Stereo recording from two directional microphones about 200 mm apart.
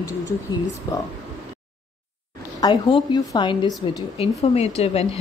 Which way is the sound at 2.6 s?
20° left (ahead or behind).